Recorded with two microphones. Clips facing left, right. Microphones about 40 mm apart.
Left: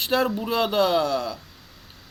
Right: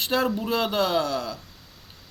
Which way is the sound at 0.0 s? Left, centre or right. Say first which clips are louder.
Left 1 dB; centre.